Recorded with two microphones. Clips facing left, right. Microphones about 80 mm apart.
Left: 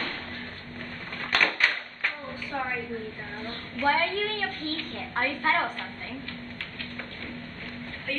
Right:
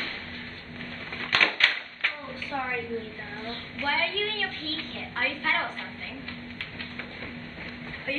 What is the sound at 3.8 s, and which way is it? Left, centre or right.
A woman's voice, left.